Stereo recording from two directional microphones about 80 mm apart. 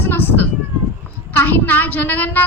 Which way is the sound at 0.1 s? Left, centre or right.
Left.